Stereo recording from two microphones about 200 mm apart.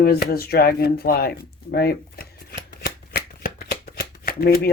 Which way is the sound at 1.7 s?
50° left (ahead or behind).